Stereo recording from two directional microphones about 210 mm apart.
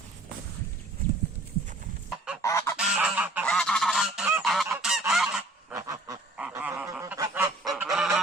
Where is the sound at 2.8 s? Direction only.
5° right (ahead or behind).